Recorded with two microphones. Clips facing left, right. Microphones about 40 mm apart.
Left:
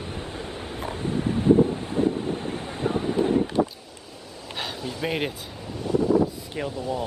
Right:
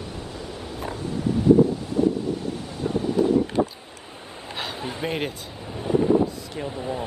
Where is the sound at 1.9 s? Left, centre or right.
Left.